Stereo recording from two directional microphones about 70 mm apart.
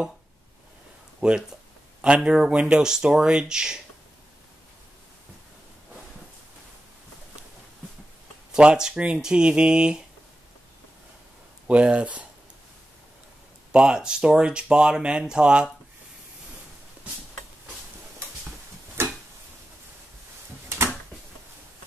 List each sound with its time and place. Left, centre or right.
1.2 s speech: centre
8.5 s speech: centre
11.6 s speech: centre
13.7 s speech: centre
19.0 s a sound: right
20.6 s a sound: right